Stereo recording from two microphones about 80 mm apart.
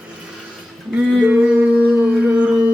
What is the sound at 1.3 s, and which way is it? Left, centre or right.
Mantra, centre.